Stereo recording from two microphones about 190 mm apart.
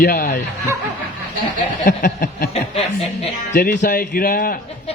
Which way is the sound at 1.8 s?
45° left (ahead or behind).